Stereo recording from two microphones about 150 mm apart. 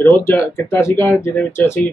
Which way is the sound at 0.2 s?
20° left (ahead or behind).